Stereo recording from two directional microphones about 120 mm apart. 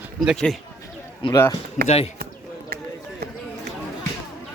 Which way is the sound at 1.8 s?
90° left.